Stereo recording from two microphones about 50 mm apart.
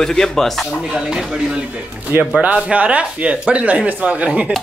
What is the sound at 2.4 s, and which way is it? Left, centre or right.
Speech, right.